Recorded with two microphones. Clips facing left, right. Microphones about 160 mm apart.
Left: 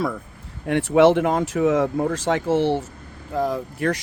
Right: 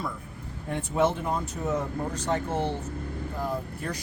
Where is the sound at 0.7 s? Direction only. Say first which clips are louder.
Left 10 dB; 90° left.